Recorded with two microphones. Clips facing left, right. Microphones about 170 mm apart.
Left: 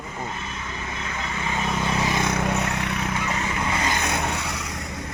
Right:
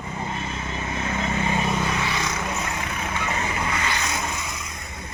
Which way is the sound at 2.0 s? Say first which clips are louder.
Left 4 dB; 50° left (ahead or behind).